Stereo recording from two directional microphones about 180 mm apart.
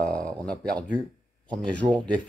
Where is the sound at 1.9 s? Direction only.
5° left (ahead or behind).